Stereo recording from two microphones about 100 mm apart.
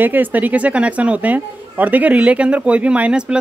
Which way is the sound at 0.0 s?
20° right (ahead or behind).